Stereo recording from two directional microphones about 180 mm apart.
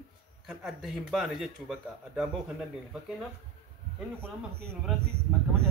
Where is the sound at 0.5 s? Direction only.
Centre (ahead or behind).